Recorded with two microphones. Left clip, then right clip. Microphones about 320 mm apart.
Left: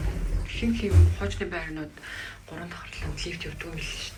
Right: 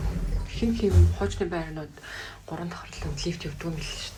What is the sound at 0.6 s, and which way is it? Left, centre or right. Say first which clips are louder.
Speech: right 3 dB; centre.